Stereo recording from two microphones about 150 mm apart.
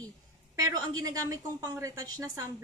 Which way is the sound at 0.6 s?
25° right (ahead or behind).